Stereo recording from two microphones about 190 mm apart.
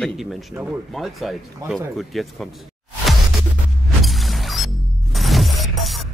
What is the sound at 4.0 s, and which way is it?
Music, centre (ahead or behind).